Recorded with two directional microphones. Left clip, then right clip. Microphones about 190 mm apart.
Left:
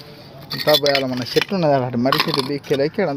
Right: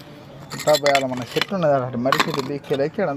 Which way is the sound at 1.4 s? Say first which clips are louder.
Right 2 dB; 45° left (ahead or behind).